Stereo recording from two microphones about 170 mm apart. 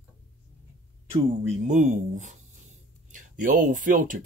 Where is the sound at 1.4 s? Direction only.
45° right (ahead or behind).